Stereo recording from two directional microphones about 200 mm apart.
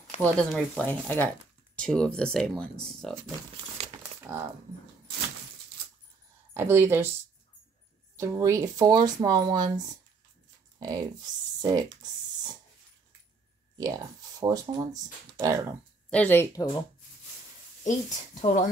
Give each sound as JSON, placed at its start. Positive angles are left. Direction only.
{"t": 0.2, "sound": "speech", "side_deg": 5}
{"t": 6.5, "sound": "speech", "side_deg": -10}
{"t": 8.2, "sound": "speech", "side_deg": -15}
{"t": 13.7, "sound": "speech", "side_deg": -20}
{"t": 16.1, "sound": "speech", "side_deg": 10}
{"t": 17.8, "sound": "a woman's voice", "side_deg": 40}